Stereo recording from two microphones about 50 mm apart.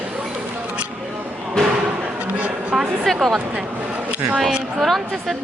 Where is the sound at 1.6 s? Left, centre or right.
Centre.